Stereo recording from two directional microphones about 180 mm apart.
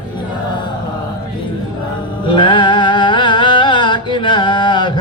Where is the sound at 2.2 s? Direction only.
25° left (ahead or behind).